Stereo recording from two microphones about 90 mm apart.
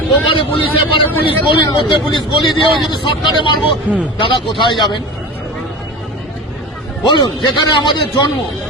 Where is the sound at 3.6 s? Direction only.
15° right (ahead or behind).